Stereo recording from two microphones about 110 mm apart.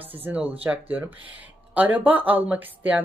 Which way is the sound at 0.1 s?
15° right (ahead or behind).